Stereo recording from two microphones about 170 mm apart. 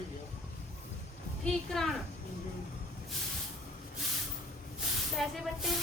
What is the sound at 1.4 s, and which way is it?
Speech, centre (ahead or behind).